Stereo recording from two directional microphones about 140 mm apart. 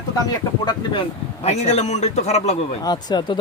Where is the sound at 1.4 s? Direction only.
45° left (ahead or behind).